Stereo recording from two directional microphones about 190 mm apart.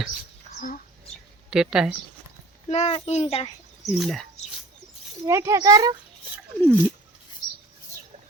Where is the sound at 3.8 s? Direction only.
Centre (ahead or behind).